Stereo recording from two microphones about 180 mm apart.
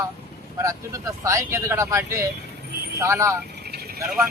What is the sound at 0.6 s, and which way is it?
Speech, 20° right (ahead or behind).